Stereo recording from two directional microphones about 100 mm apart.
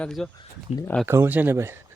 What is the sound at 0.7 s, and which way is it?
Speech, 90° left.